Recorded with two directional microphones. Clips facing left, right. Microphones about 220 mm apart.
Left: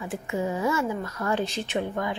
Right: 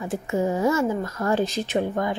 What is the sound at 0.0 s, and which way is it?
A woman's voice, 40° right (ahead or behind).